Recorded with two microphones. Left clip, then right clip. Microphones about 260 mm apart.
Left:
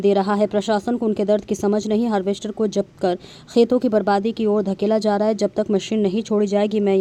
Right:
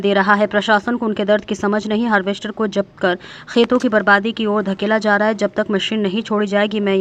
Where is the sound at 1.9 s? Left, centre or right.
Centre.